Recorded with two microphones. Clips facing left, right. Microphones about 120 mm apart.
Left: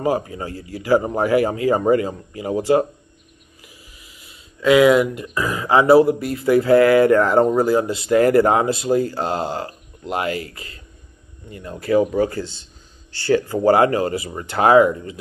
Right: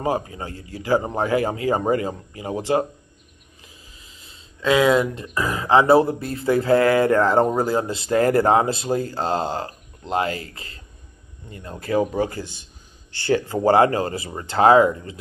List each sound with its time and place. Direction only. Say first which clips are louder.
0.0 s speech: left 3 dB; 25° right (ahead or behind)
3.6 s a sound: left 2 dB; 25° right (ahead or behind)
5.1 s speech: left 1 dB; 25° right (ahead or behind)
12.3 s speech: left 5 dB; 15° right (ahead or behind)
13.5 s speech: even; 30° right (ahead or behind)